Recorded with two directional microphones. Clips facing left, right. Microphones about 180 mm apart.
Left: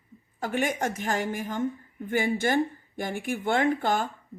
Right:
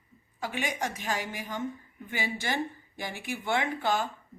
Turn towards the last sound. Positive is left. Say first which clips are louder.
# left 4 dB
turn(degrees=50)  # may be behind; listen again after turning